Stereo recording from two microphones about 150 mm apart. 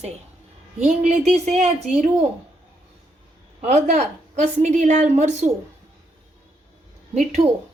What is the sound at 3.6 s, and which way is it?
A woman's voice, 50° right (ahead or behind).